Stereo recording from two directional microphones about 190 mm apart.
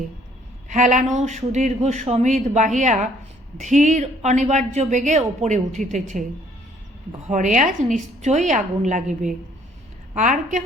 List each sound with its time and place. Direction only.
0.7 s speech: 40° right (ahead or behind)
7.3 s speech: 40° right (ahead or behind)